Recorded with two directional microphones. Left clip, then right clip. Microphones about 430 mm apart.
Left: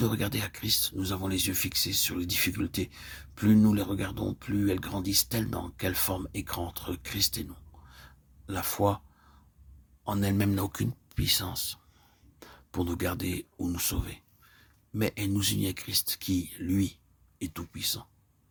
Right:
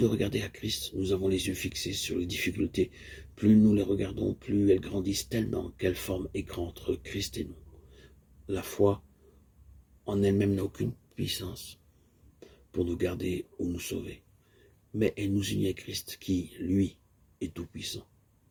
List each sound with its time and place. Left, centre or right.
0.0 s speech: left
7.9 s a sound: left
10.1 s speech: left